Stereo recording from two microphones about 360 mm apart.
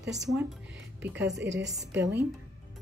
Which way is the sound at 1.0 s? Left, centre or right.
Centre.